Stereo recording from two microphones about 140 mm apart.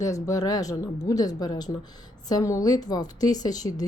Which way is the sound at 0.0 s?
25° left (ahead or behind).